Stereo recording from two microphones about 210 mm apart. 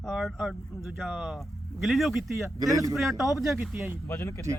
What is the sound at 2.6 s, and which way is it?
Speech, 15° right (ahead or behind).